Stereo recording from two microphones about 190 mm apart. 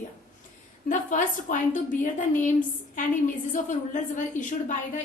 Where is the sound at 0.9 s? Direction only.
40° left (ahead or behind).